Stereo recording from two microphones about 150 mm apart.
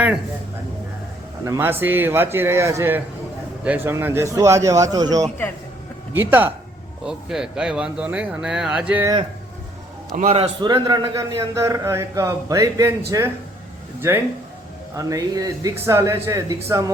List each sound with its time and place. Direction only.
1.5 s a man's voice: 15° right (ahead or behind)
6.1 s speech: 15° right (ahead or behind)
10.2 s a man's voice: 50° right (ahead or behind)
10.6 s a man's voice: 30° right (ahead or behind)
14.9 s a man's voice: 20° right (ahead or behind)